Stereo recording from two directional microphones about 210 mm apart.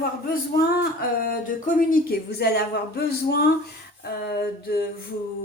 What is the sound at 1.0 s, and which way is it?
Speech, 40° left (ahead or behind).